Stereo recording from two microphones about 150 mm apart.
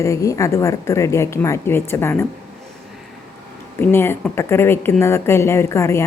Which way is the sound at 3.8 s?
15° left (ahead or behind).